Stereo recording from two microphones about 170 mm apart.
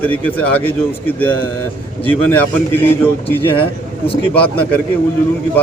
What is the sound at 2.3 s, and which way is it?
Speech, 10° left (ahead or behind).